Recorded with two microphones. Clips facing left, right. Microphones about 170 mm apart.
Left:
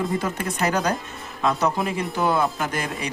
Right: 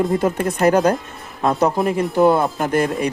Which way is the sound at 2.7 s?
50° right (ahead or behind).